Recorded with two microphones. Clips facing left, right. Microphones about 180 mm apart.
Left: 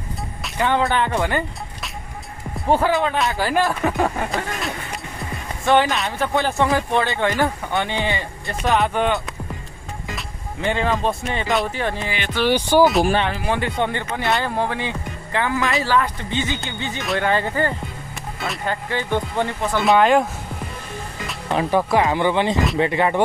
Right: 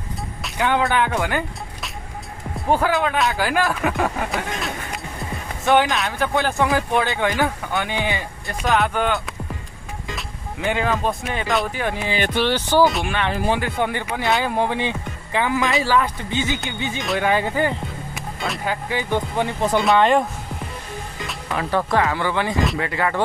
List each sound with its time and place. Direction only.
0.4 s speech: centre (ahead or behind)
12.4 s speech: 15° left (ahead or behind)
13.5 s speech: 5° right (ahead or behind)
14.5 s speech: 15° right (ahead or behind)
19.8 s speech: centre (ahead or behind)
21.5 s speech: 20° left (ahead or behind)